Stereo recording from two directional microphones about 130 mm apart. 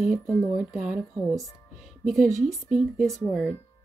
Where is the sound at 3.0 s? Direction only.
Centre (ahead or behind).